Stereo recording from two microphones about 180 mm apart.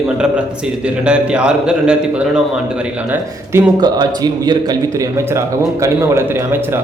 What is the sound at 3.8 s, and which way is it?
Speech, 25° right (ahead or behind).